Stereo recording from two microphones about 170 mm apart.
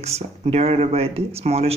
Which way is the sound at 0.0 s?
40° right (ahead or behind).